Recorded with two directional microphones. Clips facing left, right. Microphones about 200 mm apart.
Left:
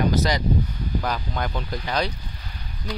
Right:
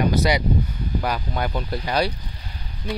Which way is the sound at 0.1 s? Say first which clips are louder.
Right 2 dB; 10° right (ahead or behind).